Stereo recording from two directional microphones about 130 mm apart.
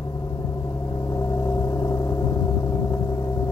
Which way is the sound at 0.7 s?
25° left (ahead or behind).